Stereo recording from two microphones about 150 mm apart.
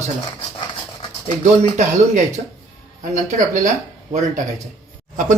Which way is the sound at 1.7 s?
55° right (ahead or behind).